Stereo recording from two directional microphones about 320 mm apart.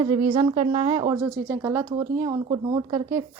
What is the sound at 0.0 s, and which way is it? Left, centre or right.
A woman's voice, centre.